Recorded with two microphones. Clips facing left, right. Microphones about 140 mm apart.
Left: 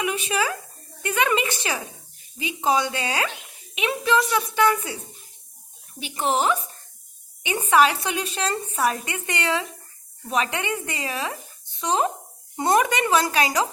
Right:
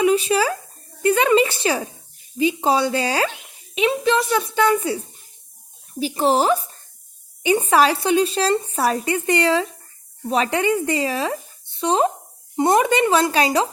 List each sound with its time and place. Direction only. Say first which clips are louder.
0.0 s a woman's voice: right 8 dB; 30° right (ahead or behind)
6.0 s a woman's voice: right 5 dB; 35° right (ahead or behind)